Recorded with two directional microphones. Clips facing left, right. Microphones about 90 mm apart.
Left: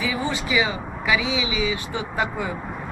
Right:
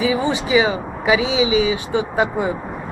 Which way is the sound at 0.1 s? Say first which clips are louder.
Right 7 dB; 20° right (ahead or behind).